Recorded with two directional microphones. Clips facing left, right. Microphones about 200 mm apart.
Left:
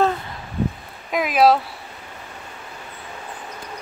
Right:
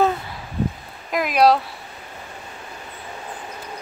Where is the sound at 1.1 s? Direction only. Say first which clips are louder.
Even; centre (ahead or behind).